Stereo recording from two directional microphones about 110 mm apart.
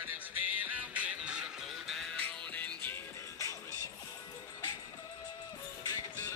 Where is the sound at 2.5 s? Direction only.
15° left (ahead or behind).